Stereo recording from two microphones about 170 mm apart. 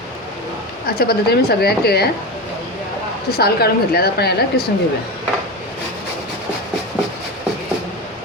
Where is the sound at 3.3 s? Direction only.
65° left (ahead or behind).